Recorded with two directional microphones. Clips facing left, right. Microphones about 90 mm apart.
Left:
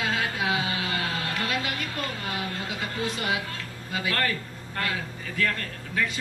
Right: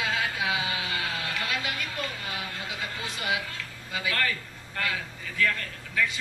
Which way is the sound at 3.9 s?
40° left (ahead or behind).